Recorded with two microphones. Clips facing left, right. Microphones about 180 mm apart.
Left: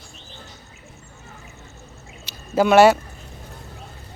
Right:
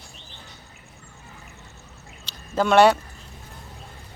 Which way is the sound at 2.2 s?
10° left (ahead or behind).